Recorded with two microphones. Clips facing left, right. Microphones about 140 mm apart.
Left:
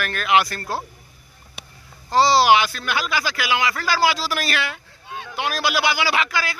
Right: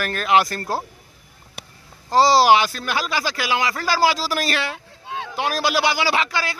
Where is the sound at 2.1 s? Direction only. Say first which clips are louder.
Right 1 dB; 40° right (ahead or behind).